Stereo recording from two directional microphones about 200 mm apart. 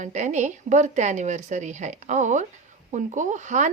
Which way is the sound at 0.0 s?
35° right (ahead or behind).